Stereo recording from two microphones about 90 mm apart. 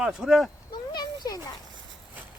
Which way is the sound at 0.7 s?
50° left (ahead or behind).